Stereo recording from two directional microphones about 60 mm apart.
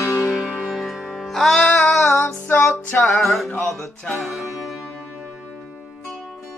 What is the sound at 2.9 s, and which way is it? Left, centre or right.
Music, left.